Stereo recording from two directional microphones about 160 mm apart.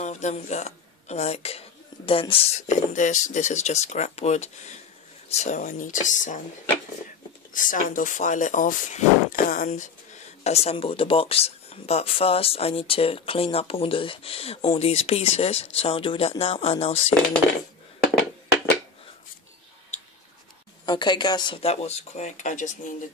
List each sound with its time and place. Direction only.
0.0 s speech: 45° left (ahead or behind)
7.5 s speech: 55° left (ahead or behind); by 17.0 s 40° left (ahead or behind)
20.8 s speech: 25° left (ahead or behind); by 22.7 s 50° left (ahead or behind)